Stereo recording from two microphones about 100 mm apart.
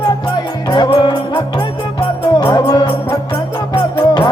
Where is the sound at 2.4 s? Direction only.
45° left (ahead or behind).